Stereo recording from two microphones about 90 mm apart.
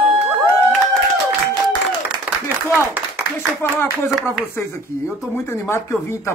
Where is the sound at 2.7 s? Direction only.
15° right (ahead or behind).